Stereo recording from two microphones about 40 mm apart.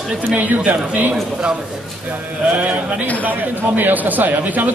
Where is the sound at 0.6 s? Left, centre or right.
Right.